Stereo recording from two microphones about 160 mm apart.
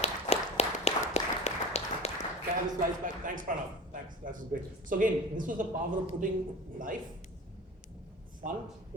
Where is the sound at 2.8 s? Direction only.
55° right (ahead or behind).